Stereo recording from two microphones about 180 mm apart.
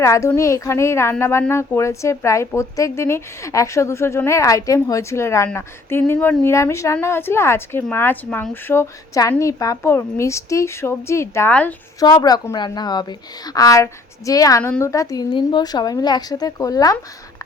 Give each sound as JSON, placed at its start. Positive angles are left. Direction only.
{"t": 0.0, "sound": "a woman's voice", "side_deg": 15}
{"t": 11.9, "sound": "a woman's voice", "side_deg": 20}